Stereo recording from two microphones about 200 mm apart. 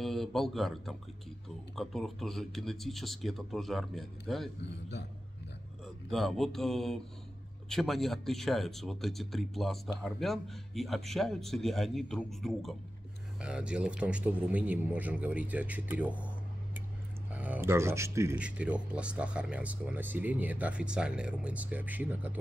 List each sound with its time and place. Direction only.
0.0 s speech: centre (ahead or behind)
4.6 s a man's voice: 60° left (ahead or behind)
6.0 s speech: centre (ahead or behind)
17.3 s speech: 10° right (ahead or behind)